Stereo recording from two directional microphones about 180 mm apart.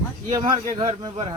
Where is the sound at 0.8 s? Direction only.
25° right (ahead or behind).